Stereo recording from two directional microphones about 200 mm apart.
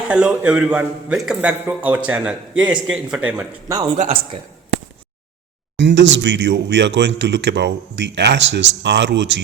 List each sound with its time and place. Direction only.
0.1 s a man's voice: 5° right (ahead or behind)
3.9 s a man's voice: 35° right (ahead or behind)
5.7 s speech: 65° right (ahead or behind)